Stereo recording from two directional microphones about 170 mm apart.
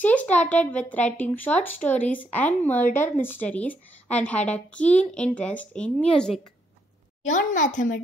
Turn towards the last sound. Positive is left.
turn(degrees=50)  # may be behind; listen again after turning